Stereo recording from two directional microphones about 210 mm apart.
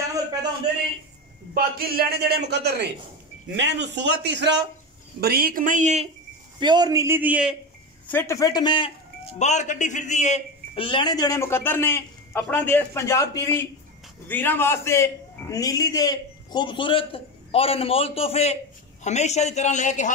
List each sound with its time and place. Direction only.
1.5 s a man's voice: 45° right (ahead or behind)
5.2 s speech: 45° right (ahead or behind)
6.6 s a man's voice: 20° right (ahead or behind)
8.1 s a man's voice: 10° left (ahead or behind)
9.4 s a man's voice: 35° left (ahead or behind)